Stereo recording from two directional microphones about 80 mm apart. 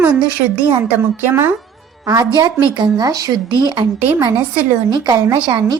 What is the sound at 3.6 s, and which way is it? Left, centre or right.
Speech, right.